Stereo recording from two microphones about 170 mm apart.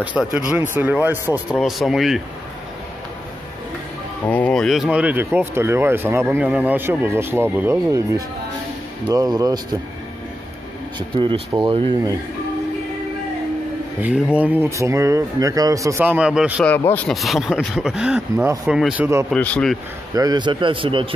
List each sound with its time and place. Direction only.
0.0 s speech: 10° right (ahead or behind)
4.3 s a man's voice: 5° left (ahead or behind); by 9.8 s 25° right (ahead or behind)
11.0 s speech: 30° right (ahead or behind)
14.0 s speech: 10° right (ahead or behind)
16.6 s speech: 10° left (ahead or behind)
19.3 s speech: 5° left (ahead or behind)
20.2 s a man's voice: 25° right (ahead or behind)